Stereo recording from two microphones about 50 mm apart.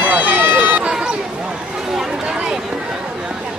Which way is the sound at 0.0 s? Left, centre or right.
Right.